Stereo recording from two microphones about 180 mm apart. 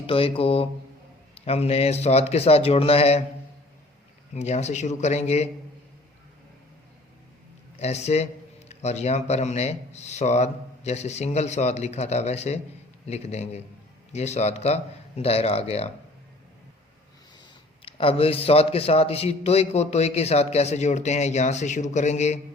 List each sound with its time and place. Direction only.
0.0 s a man's voice: 30° left (ahead or behind)
4.4 s a man's voice: 40° left (ahead or behind)
7.8 s a man's voice: 35° left (ahead or behind)
17.8 s a man's voice: 30° left (ahead or behind)